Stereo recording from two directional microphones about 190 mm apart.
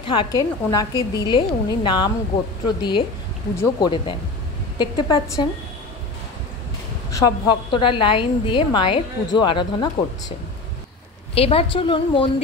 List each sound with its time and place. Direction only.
0.0 s a woman's voice: 25° left (ahead or behind)
7.1 s a woman's voice: 20° left (ahead or behind)
11.3 s a woman's voice: 30° left (ahead or behind)